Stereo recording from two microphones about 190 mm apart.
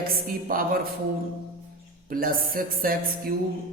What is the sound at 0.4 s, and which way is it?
Mantra, 50° right (ahead or behind).